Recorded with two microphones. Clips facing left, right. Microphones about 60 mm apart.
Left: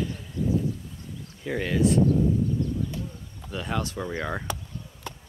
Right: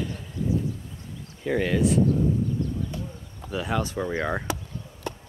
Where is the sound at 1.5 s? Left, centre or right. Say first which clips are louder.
Right 1 dB; centre.